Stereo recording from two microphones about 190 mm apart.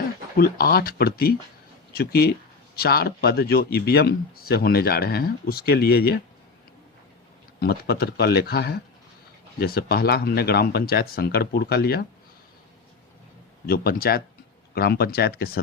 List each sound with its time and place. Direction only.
0.3 s speech: 55° left (ahead or behind)
7.6 s speech: 55° left (ahead or behind)
13.7 s speech: 50° left (ahead or behind)